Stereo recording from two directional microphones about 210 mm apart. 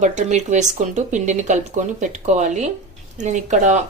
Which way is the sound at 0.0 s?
35° right (ahead or behind).